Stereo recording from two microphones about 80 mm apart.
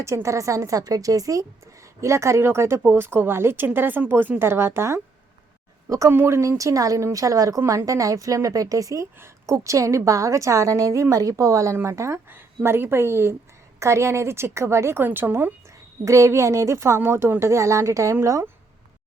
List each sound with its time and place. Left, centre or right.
0.0 s a woman's voice: right
16.0 s a woman's voice: right